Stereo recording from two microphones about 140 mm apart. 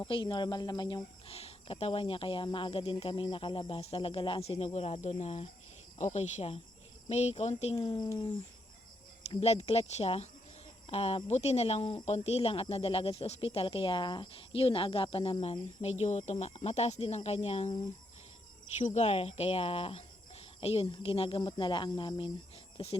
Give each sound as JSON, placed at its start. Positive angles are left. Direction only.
{"t": 0.0, "sound": "speech", "side_deg": 35}
{"t": 1.3, "sound": "speech", "side_deg": 45}
{"t": 7.9, "sound": "speech", "side_deg": 30}
{"t": 9.4, "sound": "speech", "side_deg": 50}
{"t": 18.8, "sound": "speech", "side_deg": 55}